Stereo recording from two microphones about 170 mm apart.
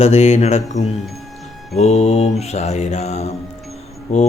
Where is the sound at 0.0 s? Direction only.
40° left (ahead or behind).